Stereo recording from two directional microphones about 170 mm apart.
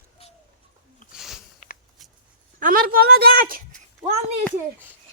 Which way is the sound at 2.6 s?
55° right (ahead or behind).